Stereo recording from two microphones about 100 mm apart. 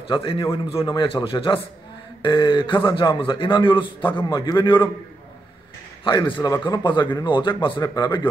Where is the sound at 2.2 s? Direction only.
50° left (ahead or behind).